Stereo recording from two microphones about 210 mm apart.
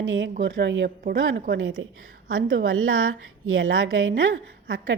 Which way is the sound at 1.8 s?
70° right (ahead or behind).